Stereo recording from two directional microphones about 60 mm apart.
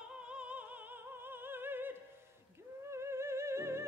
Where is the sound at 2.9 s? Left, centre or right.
Right.